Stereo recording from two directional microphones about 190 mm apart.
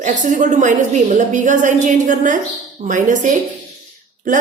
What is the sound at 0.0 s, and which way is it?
A woman's voice, 40° right (ahead or behind).